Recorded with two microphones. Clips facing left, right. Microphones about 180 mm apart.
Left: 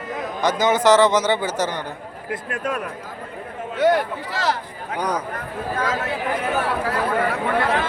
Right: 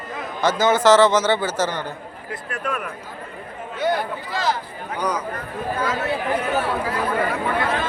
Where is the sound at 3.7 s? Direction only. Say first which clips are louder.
Left 5 dB; 90° left.